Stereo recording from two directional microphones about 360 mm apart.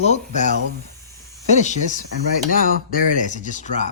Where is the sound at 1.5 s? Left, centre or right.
Centre.